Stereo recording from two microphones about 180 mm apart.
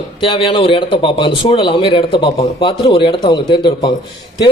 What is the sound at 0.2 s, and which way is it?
Speech, 30° left (ahead or behind).